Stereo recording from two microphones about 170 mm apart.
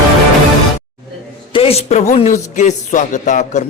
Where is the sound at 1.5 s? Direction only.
35° left (ahead or behind).